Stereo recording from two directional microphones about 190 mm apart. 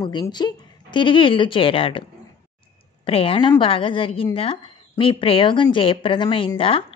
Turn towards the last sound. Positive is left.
turn(degrees=30)  # may be behind; listen again after turning